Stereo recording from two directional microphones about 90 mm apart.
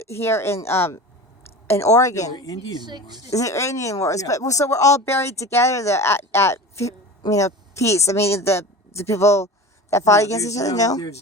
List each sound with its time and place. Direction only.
0.0 s a woman's voice: 30° left (ahead or behind)
2.7 s speech: 50° right (ahead or behind)
3.3 s speech: 35° left (ahead or behind)